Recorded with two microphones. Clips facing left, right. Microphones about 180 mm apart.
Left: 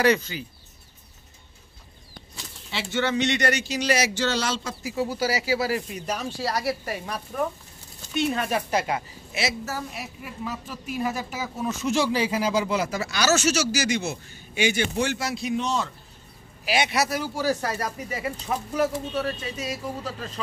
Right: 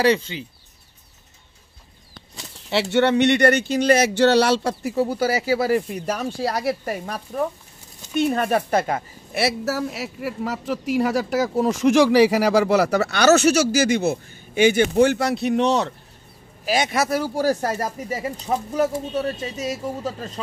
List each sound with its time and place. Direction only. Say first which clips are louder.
0.0 s speech: right 2 dB; 30° right (ahead or behind)
2.7 s a woman's voice: right 8 dB; 65° right (ahead or behind)
16.6 s speech: right 3 dB; 45° right (ahead or behind)
19.5 s speech: right 5 dB; 40° right (ahead or behind)